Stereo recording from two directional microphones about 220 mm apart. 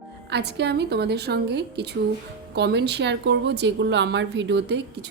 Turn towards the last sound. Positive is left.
turn(degrees=-50)  # may be behind; listen again after turning